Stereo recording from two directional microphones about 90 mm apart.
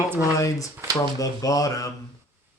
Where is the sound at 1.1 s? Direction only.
40° left (ahead or behind).